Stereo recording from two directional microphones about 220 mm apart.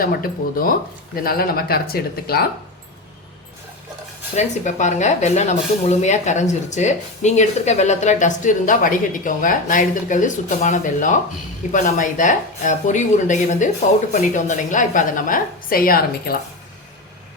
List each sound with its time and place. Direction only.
0.0 s speech: 40° left (ahead or behind)
4.4 s speech: 35° left (ahead or behind)